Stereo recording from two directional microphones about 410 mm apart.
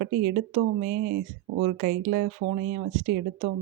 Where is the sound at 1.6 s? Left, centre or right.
Right.